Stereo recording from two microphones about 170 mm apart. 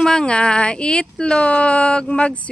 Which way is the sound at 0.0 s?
5° left (ahead or behind).